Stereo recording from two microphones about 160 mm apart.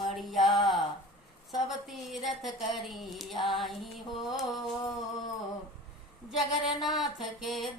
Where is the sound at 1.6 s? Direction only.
Centre (ahead or behind).